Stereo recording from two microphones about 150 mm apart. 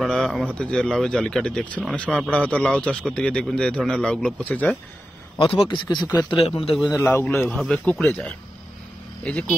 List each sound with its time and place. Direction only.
0.0 s a sound: 5° left (ahead or behind)
0.6 s speech: 5° left (ahead or behind)
5.4 s a man's voice: 35° left (ahead or behind)
6.3 s a man's voice: 40° left (ahead or behind)
7.0 s speech: 15° left (ahead or behind)